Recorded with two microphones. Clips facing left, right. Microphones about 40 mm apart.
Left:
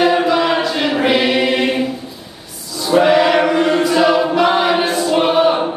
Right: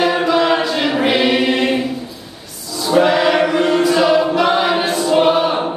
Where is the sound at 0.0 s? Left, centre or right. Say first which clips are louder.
Left 1 dB; centre.